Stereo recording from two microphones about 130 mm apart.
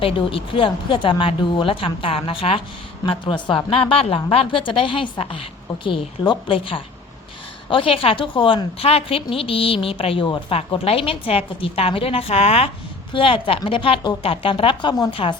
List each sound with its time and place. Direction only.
0.0 s a woman's voice: 45° left (ahead or behind)
15.1 s a woman's voice: 45° left (ahead or behind)